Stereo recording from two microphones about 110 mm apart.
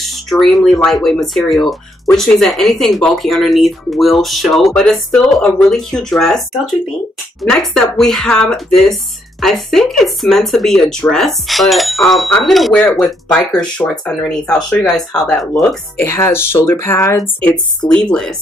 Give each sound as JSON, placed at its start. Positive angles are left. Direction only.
{"t": 0.3, "sound": "speech", "side_deg": 5}
{"t": 7.4, "sound": "speech", "side_deg": 5}
{"t": 13.6, "sound": "speech", "side_deg": 10}
{"t": 16.0, "sound": "speech", "side_deg": 25}
{"t": 17.8, "sound": "speech", "side_deg": 40}